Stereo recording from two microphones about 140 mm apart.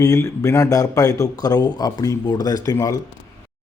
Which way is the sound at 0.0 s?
25° left (ahead or behind).